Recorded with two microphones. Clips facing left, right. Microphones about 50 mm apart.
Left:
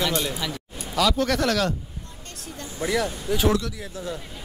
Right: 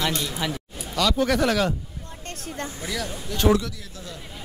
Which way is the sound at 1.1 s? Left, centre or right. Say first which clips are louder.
Right 1 dB; centre.